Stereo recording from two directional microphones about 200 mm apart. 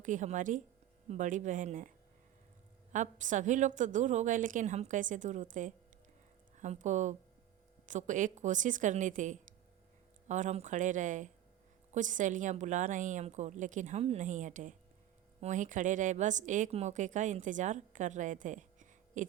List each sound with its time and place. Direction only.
0.0 s a woman's voice: 40° right (ahead or behind)
2.9 s a woman's voice: 40° right (ahead or behind)